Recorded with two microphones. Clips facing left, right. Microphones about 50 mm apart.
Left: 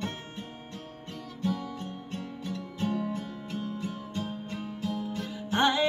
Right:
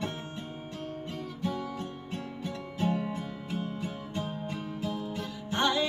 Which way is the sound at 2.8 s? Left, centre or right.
Centre.